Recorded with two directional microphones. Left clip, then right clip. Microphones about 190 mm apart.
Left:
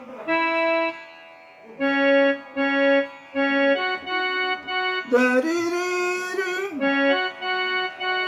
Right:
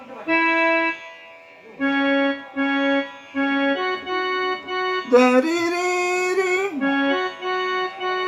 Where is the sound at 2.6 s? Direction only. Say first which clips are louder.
Right 2 dB; 25° left (ahead or behind).